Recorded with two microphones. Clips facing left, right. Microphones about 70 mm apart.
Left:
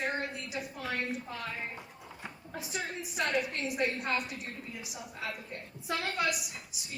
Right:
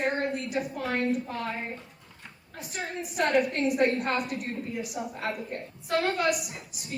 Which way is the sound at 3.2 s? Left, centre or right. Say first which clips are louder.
Right 7 dB; right.